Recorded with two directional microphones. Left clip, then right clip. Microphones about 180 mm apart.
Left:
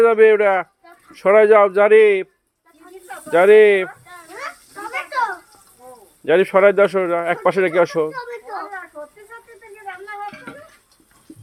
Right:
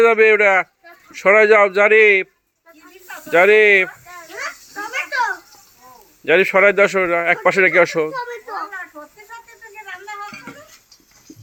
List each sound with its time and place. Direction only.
0.0 s speech: 10° left (ahead or behind)
3.2 s speech: 10° left (ahead or behind)
6.2 s speech: 10° left (ahead or behind)
8.1 s children playing: 20° left (ahead or behind)